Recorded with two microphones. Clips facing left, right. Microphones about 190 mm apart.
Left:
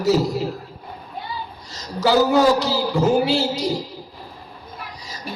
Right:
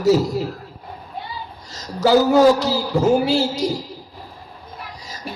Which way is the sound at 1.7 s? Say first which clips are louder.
Right 3 dB; 45° right (ahead or behind).